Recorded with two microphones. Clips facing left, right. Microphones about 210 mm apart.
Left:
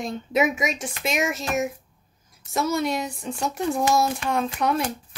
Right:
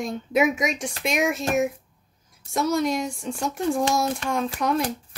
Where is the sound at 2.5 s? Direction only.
5° left (ahead or behind).